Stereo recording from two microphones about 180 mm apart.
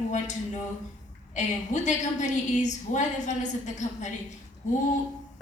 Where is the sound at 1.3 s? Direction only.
40° left (ahead or behind).